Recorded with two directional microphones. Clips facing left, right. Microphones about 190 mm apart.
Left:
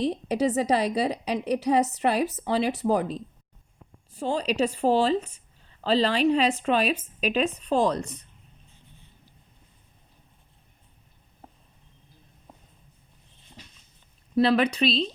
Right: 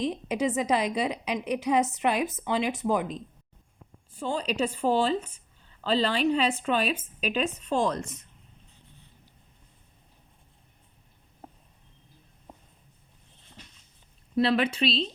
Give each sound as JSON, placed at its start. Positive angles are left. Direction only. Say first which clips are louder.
{"t": 0.0, "sound": "a woman's voice", "louder": "left 3 dB", "side_deg": 35}
{"t": 14.3, "sound": "a woman's voice", "louder": "left 3 dB", "side_deg": 40}